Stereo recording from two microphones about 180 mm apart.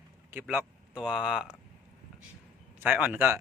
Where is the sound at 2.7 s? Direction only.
10° right (ahead or behind).